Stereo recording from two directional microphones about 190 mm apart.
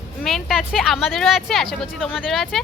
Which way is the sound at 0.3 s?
Centre (ahead or behind).